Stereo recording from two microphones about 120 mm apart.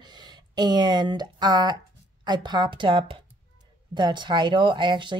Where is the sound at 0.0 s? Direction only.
35° right (ahead or behind).